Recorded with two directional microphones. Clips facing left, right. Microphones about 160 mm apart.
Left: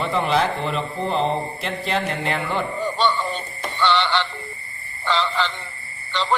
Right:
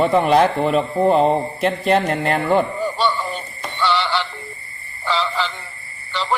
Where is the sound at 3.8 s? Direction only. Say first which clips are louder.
Even; 5° right (ahead or behind).